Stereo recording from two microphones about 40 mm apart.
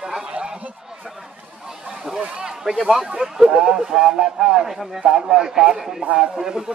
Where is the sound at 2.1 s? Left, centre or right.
Right.